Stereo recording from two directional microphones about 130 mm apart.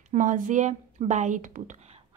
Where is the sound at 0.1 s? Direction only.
75° right (ahead or behind).